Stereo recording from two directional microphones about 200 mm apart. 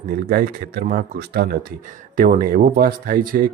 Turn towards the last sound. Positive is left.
turn(degrees=-45)  # may be behind; listen again after turning